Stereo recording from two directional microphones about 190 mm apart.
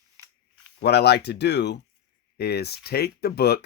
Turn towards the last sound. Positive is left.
turn(degrees=55)  # may be behind; listen again after turning